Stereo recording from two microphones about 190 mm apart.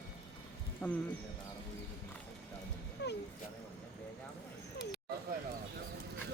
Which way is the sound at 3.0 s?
60° left (ahead or behind).